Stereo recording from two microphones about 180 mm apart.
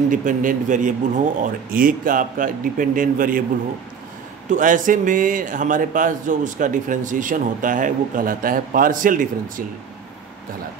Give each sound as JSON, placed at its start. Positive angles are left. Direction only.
{"t": 0.1, "sound": "speech", "side_deg": -45}
{"t": 4.5, "sound": "speech", "side_deg": -45}